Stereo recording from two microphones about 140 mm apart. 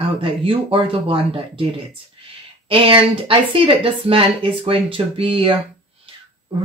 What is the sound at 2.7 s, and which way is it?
Speech, 40° right (ahead or behind).